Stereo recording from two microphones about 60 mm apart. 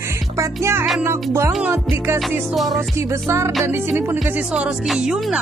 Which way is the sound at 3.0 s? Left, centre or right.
Right.